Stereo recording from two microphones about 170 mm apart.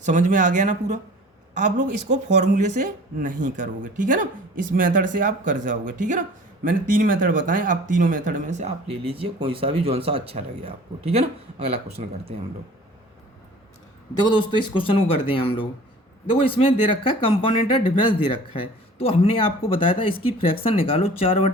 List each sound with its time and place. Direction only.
0.0 s speech: 45° right (ahead or behind)
2.0 s speech: 45° right (ahead or behind)
14.2 s speech: 25° left (ahead or behind)